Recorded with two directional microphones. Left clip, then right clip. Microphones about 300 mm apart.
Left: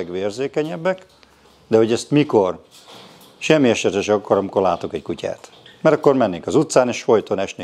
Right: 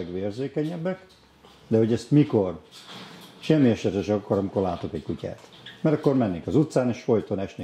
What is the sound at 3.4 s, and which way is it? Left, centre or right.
Speech, centre.